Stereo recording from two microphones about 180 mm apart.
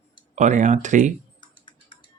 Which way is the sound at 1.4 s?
25° left (ahead or behind).